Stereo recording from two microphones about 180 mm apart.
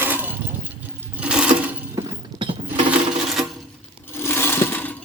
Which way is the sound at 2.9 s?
Centre (ahead or behind).